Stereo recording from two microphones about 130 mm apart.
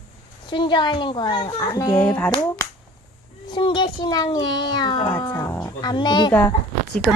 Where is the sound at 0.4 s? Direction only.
40° left (ahead or behind).